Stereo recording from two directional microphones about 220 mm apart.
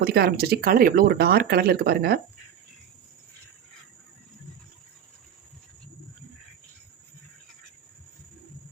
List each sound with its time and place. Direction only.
0.0 s speech: 45° right (ahead or behind)